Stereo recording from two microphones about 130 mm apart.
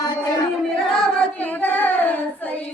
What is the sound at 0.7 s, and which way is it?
Singing, 5° left (ahead or behind).